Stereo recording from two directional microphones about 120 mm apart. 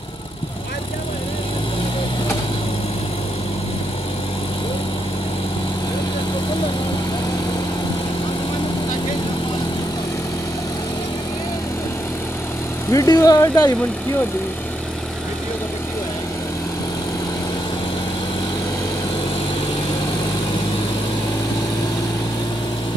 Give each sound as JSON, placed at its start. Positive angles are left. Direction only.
{"t": 12.9, "sound": "speech", "side_deg": 30}